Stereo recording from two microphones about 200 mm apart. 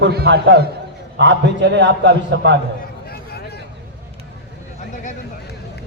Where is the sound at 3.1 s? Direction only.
50° left (ahead or behind).